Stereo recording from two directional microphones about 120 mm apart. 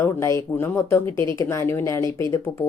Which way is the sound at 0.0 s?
25° left (ahead or behind).